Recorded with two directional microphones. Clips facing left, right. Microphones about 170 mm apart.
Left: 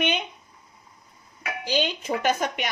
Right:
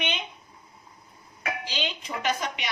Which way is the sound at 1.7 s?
50° left (ahead or behind).